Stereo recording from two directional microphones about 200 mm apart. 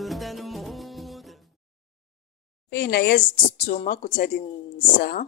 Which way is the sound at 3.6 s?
45° left (ahead or behind).